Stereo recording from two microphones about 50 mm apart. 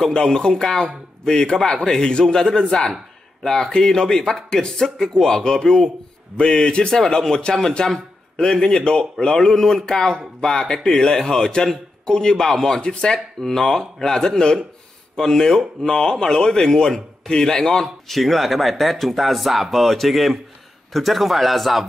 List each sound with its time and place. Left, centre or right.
0.1 s speech: centre